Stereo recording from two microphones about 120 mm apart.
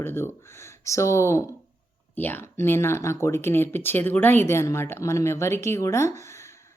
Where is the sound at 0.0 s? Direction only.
20° left (ahead or behind).